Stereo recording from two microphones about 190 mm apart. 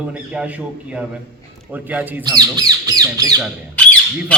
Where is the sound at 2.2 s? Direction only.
20° right (ahead or behind).